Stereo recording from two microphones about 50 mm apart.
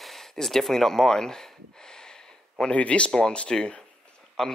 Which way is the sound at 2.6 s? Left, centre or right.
Left.